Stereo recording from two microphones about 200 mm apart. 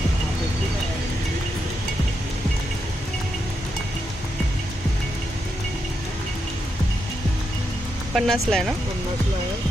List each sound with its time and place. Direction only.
8.1 s speech: centre (ahead or behind)